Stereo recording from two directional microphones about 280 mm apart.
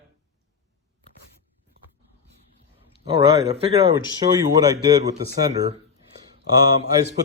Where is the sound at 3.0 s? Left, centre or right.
Centre.